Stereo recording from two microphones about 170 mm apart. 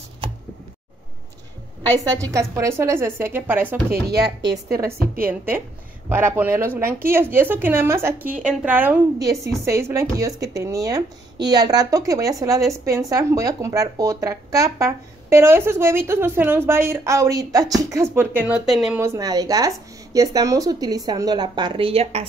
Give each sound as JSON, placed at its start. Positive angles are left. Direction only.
{"t": 2.3, "sound": "speech", "side_deg": -20}
{"t": 4.4, "sound": "a woman's voice", "side_deg": -90}
{"t": 5.2, "sound": "speech", "side_deg": -10}
{"t": 18.9, "sound": "speech", "side_deg": -20}